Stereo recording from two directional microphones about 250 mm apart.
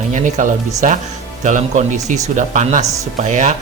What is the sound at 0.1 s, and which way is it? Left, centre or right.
Speech, right.